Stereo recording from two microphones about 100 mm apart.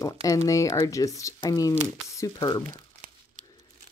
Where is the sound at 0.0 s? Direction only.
35° left (ahead or behind).